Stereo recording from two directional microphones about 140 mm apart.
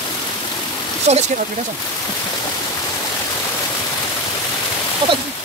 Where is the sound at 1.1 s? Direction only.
50° right (ahead or behind).